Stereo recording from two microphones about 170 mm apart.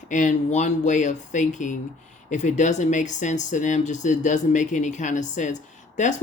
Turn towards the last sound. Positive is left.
turn(degrees=45)  # may be behind; listen again after turning